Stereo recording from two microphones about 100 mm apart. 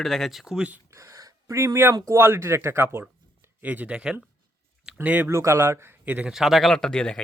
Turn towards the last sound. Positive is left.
turn(degrees=10)  # may be behind; listen again after turning